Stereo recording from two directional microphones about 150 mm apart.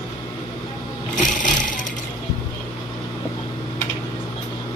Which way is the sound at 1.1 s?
60° left (ahead or behind).